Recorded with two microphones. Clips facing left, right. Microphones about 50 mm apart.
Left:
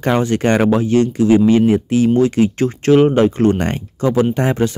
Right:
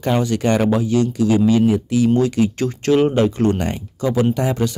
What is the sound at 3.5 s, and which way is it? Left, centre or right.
Speech, left.